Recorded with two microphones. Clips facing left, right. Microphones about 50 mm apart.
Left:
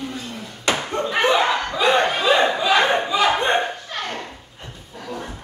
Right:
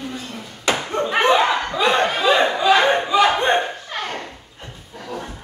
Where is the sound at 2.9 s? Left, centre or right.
Centre.